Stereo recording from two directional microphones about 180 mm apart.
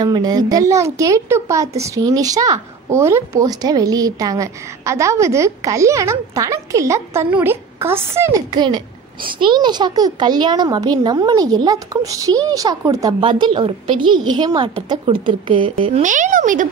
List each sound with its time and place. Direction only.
0.0 s a woman's voice: 20° right (ahead or behind)
16.0 s speech: 45° right (ahead or behind)